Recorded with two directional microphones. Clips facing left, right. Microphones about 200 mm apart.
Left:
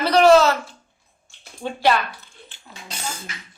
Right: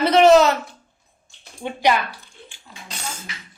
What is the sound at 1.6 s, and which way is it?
Speech, 15° right (ahead or behind).